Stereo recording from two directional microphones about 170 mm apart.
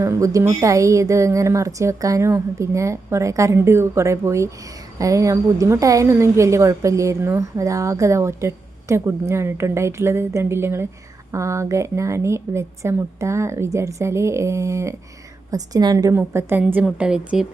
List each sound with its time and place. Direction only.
0.0 s a woman's voice: 15° right (ahead or behind)